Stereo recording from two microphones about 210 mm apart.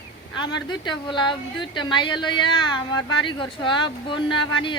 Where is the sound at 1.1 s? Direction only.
20° left (ahead or behind).